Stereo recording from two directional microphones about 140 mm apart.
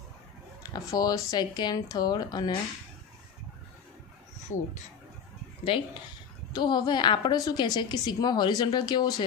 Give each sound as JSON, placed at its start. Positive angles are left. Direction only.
{"t": 0.7, "sound": "speech", "side_deg": 25}
{"t": 5.7, "sound": "a woman's voice", "side_deg": 40}